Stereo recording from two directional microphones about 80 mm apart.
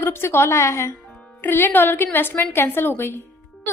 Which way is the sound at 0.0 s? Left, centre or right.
Left.